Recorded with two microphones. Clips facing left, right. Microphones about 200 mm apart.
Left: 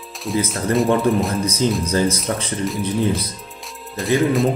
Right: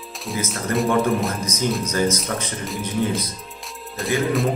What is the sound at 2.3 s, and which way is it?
Speech, 30° left (ahead or behind).